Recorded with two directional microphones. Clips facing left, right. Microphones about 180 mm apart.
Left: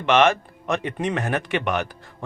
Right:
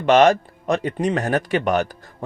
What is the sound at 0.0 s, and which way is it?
A man's voice, 40° right (ahead or behind).